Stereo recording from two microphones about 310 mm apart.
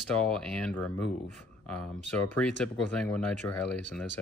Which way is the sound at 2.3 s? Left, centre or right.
Centre.